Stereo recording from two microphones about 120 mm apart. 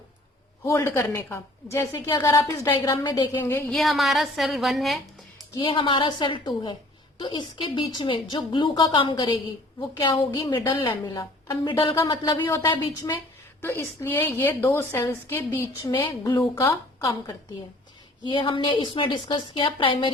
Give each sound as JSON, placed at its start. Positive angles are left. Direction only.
{"t": 0.6, "sound": "a woman's voice", "side_deg": 25}
{"t": 2.9, "sound": "a woman's voice", "side_deg": 40}
{"t": 3.7, "sound": "a woman's voice", "side_deg": 0}
{"t": 5.5, "sound": "a woman's voice", "side_deg": 45}
{"t": 12.0, "sound": "a woman's voice", "side_deg": 40}
{"t": 13.6, "sound": "a woman's voice", "side_deg": 20}
{"t": 15.9, "sound": "a woman's voice", "side_deg": 40}
{"t": 16.6, "sound": "a woman's voice", "side_deg": 25}
{"t": 18.3, "sound": "a woman's voice", "side_deg": 45}